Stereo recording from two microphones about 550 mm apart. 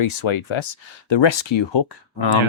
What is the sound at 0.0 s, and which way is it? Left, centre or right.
Speech, left.